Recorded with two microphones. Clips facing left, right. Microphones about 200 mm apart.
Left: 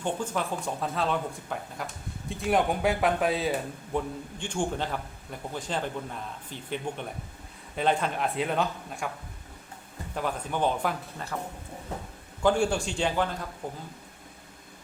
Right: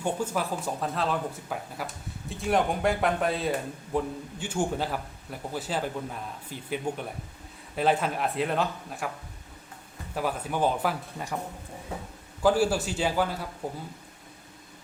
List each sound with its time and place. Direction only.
0.0 s a man's voice: 10° right (ahead or behind)
10.2 s a man's voice: 5° right (ahead or behind)
12.4 s speech: 5° right (ahead or behind)